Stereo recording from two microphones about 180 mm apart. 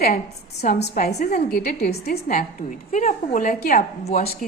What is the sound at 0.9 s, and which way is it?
A woman's voice, 55° left (ahead or behind).